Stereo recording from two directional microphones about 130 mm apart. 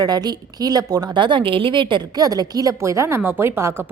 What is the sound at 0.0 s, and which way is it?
A woman's voice, 30° right (ahead or behind).